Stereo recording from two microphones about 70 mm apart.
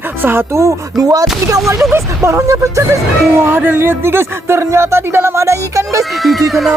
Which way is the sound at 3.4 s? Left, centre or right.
Right.